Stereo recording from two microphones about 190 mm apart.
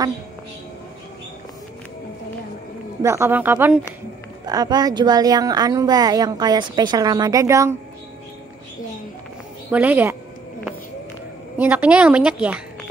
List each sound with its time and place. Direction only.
3.0 s a woman's voice: 15° right (ahead or behind)
9.7 s a woman's voice: 10° right (ahead or behind)
11.5 s a woman's voice: 10° right (ahead or behind)